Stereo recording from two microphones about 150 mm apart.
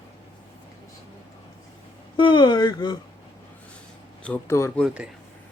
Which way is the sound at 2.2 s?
30° left (ahead or behind).